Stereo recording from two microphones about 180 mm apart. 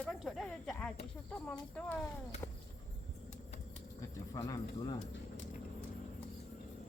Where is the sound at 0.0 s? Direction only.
Centre (ahead or behind).